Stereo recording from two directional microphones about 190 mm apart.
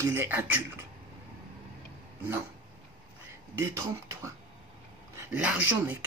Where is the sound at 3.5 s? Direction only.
15° right (ahead or behind).